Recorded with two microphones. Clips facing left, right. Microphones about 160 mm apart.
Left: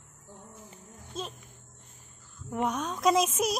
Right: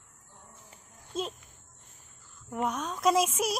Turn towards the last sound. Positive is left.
turn(degrees=-5)  # may be behind; listen again after turning